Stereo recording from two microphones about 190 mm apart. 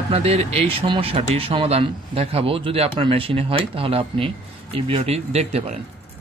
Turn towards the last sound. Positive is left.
turn(degrees=-35)  # may be behind; listen again after turning